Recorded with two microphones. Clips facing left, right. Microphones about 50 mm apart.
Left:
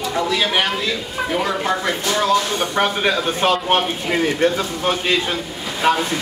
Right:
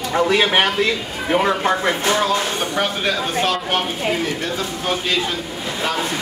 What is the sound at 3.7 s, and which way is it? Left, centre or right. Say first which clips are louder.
Speech: left 2 dB; left.